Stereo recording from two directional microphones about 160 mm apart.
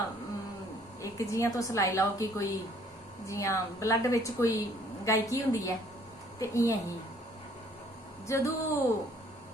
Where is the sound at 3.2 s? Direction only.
20° left (ahead or behind).